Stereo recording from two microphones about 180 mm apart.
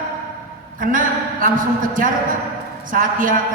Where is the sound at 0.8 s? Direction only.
50° right (ahead or behind).